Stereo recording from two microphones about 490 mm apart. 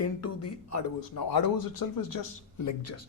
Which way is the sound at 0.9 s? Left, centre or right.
Left.